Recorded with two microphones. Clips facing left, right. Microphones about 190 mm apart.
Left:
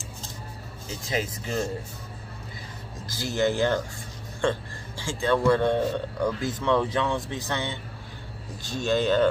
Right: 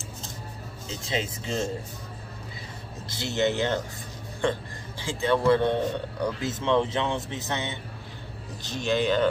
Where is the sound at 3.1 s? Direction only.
25° right (ahead or behind).